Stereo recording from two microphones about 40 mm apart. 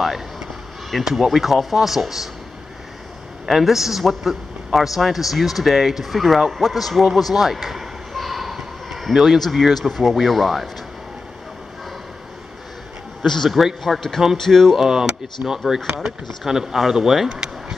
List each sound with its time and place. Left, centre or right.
0.8 s speech: centre
3.4 s speech: centre
7.2 s basketball bounce: centre
9.4 s speech: centre
13.2 s speech: centre
14.8 s speech: centre
17.3 s a sound: centre